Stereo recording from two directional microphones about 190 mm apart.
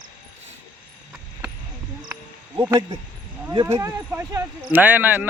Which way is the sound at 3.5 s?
15° right (ahead or behind).